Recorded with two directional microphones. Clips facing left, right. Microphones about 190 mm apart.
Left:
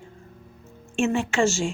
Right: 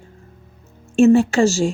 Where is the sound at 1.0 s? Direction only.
40° right (ahead or behind).